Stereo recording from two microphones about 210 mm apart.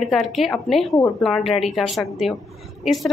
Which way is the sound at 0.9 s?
15° left (ahead or behind).